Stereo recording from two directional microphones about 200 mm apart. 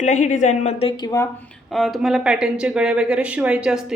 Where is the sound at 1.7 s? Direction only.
Centre (ahead or behind).